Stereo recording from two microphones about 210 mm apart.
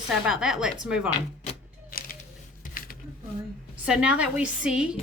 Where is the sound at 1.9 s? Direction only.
45° left (ahead or behind).